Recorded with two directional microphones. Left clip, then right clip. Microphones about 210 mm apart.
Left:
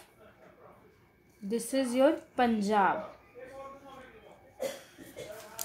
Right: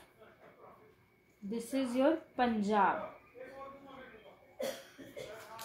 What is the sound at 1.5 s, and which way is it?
A woman's voice, 45° left (ahead or behind).